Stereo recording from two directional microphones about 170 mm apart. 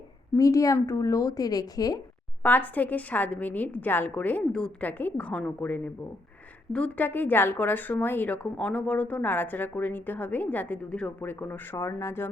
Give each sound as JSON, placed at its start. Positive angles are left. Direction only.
{"t": 0.3, "sound": "a woman's voice", "side_deg": 20}
{"t": 2.4, "sound": "speech", "side_deg": 10}